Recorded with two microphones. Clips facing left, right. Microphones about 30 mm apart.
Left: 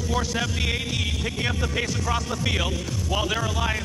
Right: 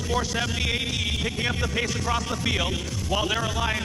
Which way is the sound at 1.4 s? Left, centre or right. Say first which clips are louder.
Left 1 dB; centre.